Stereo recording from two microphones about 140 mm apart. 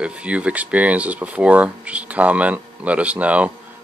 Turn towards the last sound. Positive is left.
turn(degrees=-10)  # may be behind; listen again after turning